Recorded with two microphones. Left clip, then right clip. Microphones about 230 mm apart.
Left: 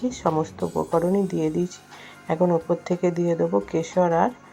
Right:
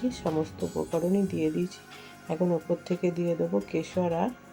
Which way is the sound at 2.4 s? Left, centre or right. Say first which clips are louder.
Left 6 dB; left.